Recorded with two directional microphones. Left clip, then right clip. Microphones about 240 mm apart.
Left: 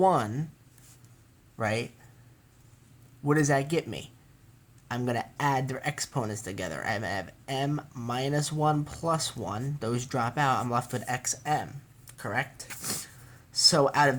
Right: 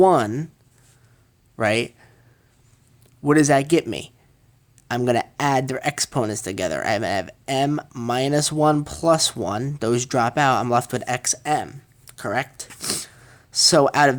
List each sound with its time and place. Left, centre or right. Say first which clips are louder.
0.0 s speech: right 8 dB; right
1.5 s speech: right 10 dB; right
3.2 s speech: right 9 dB; right